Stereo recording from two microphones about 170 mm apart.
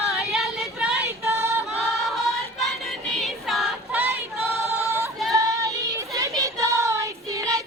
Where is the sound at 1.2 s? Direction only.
15° right (ahead or behind).